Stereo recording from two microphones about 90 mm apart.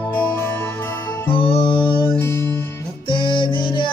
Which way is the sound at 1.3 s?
80° left.